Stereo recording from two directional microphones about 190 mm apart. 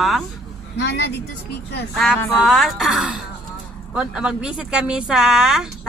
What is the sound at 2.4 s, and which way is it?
Speech, centre (ahead or behind).